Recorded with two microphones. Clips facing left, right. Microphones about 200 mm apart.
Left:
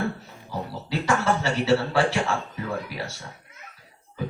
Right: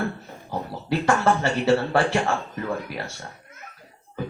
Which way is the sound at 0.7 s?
55° right (ahead or behind).